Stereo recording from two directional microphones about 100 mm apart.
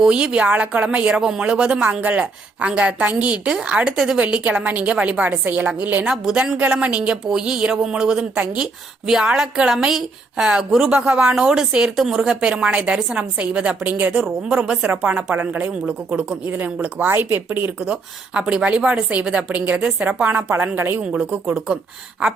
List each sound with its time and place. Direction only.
0.0 s speech: 10° right (ahead or behind)
17.7 s speech: 10° right (ahead or behind)